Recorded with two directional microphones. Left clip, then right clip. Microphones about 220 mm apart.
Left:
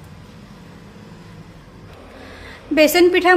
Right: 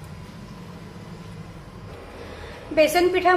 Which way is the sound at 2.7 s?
50° left (ahead or behind).